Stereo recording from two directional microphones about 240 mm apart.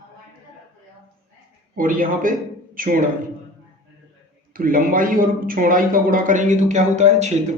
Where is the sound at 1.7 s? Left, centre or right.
Right.